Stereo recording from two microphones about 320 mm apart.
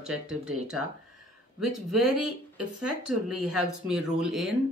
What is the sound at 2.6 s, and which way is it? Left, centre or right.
Speech, right.